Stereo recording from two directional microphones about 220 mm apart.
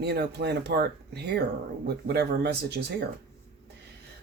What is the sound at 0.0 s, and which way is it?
Speech, 45° right (ahead or behind).